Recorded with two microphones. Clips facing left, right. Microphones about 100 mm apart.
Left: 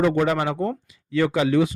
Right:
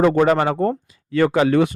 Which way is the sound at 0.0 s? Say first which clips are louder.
Right 5 dB; 45° right (ahead or behind).